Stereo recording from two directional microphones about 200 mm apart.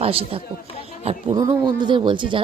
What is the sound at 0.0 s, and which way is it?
Speech, 30° right (ahead or behind).